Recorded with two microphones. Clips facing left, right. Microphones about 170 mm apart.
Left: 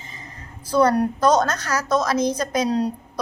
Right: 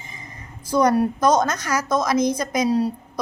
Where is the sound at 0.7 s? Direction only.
15° right (ahead or behind).